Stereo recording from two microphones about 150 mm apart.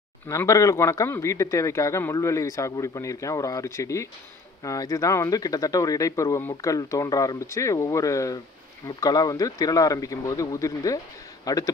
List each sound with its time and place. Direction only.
0.3 s speech: 20° left (ahead or behind)